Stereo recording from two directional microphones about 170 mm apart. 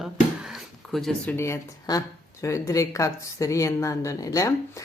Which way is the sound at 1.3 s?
15° left (ahead or behind).